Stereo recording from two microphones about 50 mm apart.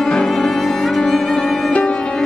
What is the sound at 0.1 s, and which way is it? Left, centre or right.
Cello, centre.